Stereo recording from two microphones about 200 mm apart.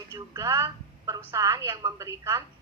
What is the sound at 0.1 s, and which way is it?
A woman's voice, 15° right (ahead or behind).